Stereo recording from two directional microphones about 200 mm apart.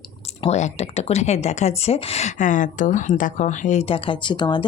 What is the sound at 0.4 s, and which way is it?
A woman's voice, 35° left (ahead or behind).